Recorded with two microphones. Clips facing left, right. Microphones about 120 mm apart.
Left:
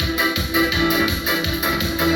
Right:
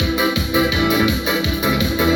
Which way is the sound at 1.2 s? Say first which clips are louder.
Right 3 dB; 50° right (ahead or behind).